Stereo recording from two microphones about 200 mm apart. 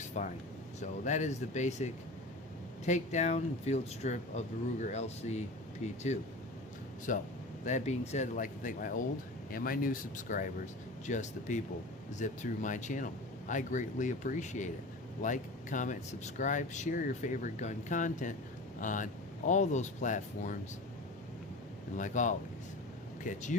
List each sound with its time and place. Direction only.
0.0 s air conditioning: 35° left (ahead or behind)
0.8 s speech: 40° left (ahead or behind)
7.1 s speech: 45° left (ahead or behind)
21.9 s speech: 40° left (ahead or behind)